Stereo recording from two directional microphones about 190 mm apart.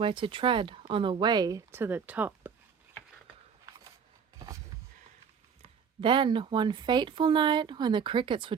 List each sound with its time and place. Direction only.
0.0 s speech: 25° right (ahead or behind); by 2.5 s 10° right (ahead or behind)
6.0 s speech: 25° right (ahead or behind)